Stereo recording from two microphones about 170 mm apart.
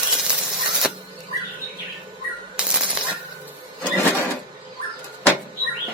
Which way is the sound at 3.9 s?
10° left (ahead or behind).